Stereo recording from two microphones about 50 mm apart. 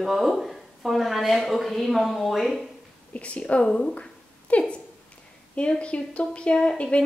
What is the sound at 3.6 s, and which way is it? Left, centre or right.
Speech, centre.